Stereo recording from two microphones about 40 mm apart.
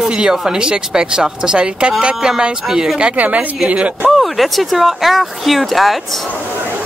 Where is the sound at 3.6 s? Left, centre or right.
Right.